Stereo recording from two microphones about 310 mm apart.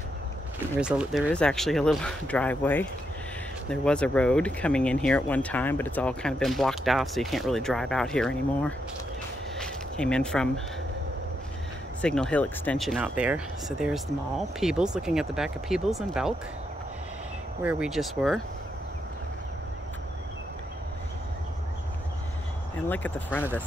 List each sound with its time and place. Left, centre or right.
0.6 s speech: centre
9.6 s a sound: centre
12.0 s speech: centre
17.6 s speech: centre
22.8 s speech: centre